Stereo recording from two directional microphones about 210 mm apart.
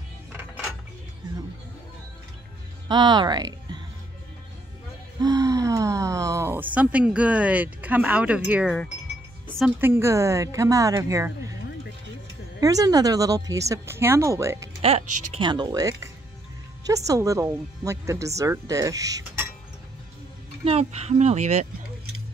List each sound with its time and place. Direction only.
0.3 s music: 10° right (ahead or behind)
2.9 s speech: 20° right (ahead or behind)
5.2 s speech: 15° right (ahead or behind)
8.5 s wind chime: 5° right (ahead or behind)
9.8 s speech: 10° right (ahead or behind)
12.5 s speech: 15° right (ahead or behind)
14.8 s speech: 30° right (ahead or behind)
15.0 s speech: 90° right
15.3 s speech: 20° right (ahead or behind)
20.6 s speech: 30° right (ahead or behind)